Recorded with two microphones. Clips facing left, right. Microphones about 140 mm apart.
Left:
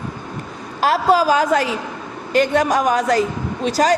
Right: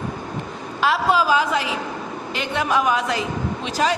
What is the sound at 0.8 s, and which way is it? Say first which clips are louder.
A man's voice: left 4 dB; 40° left (ahead or behind).